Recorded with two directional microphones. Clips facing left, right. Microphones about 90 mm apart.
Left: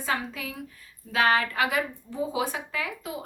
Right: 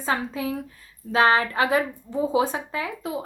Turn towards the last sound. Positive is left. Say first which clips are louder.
# right 4 dB
turn(degrees=-30)  # may be behind; listen again after turning